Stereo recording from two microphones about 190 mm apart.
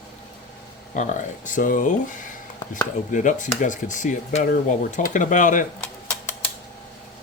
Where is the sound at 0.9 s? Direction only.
40° left (ahead or behind).